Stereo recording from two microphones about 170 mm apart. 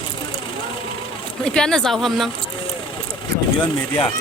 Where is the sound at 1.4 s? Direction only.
5° left (ahead or behind).